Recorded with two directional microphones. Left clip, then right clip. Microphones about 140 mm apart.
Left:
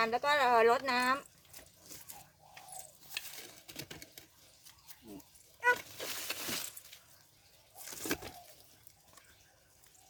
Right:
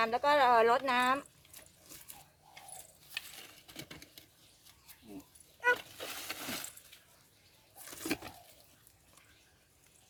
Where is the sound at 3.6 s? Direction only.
20° left (ahead or behind).